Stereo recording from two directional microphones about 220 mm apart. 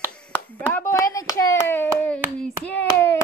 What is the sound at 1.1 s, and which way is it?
Hands, 15° left (ahead or behind).